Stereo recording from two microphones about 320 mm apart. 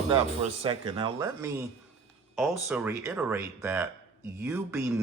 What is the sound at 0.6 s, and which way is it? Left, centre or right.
Speech, centre.